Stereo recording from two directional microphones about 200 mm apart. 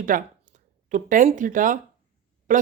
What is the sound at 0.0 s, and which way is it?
Speech, 40° right (ahead or behind).